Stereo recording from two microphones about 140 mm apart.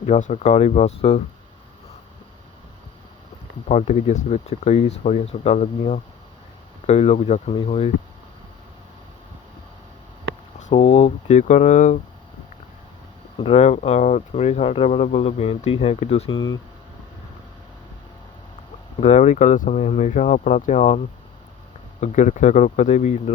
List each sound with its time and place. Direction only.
0.0 s speech: 55° left (ahead or behind)
3.7 s speech: 55° left (ahead or behind)
7.5 s speech: 40° left (ahead or behind)
10.6 s speech: 55° left (ahead or behind)
13.4 s speech: 50° left (ahead or behind)
18.9 s speech: 55° left (ahead or behind)
22.0 s speech: 60° left (ahead or behind)